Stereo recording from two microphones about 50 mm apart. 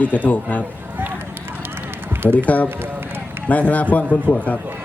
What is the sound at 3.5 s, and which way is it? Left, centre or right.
Speech, left.